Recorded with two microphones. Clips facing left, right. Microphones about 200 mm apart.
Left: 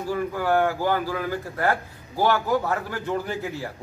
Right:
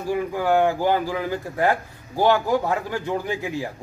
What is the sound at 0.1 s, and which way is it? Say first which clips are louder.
A man's voice: right 3 dB; 15° right (ahead or behind).